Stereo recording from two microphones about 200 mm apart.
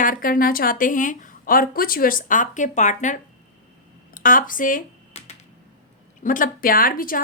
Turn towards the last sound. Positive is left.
turn(degrees=45)  # may be behind; listen again after turning